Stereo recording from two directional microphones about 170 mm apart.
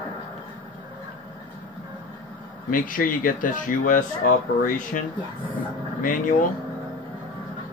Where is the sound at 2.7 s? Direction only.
55° left (ahead or behind).